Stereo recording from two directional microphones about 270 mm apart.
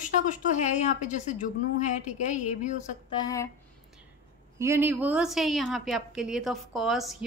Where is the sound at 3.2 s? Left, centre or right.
Centre.